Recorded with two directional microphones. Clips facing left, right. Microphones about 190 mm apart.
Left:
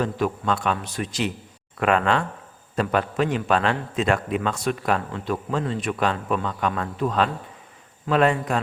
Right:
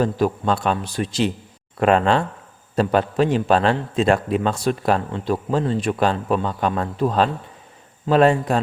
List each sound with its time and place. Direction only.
0.0 s a man's voice: 35° right (ahead or behind)